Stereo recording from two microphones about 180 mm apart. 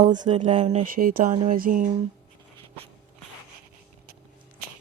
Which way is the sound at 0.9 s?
55° right (ahead or behind).